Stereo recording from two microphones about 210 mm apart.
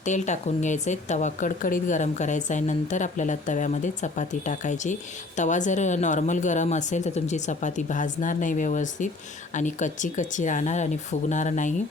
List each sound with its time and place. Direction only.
0.0 s speech: 35° left (ahead or behind)